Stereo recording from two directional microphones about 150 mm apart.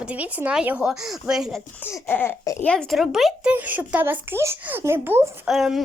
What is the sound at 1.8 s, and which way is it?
Speech, 15° left (ahead or behind).